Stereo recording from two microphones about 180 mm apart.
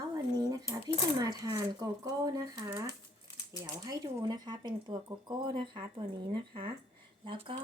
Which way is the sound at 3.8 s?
20° right (ahead or behind).